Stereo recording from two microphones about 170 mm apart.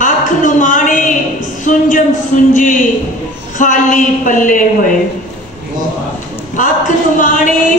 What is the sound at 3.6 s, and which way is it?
A woman's voice, 50° left (ahead or behind).